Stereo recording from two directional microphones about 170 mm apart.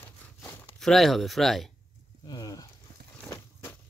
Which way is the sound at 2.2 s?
25° left (ahead or behind).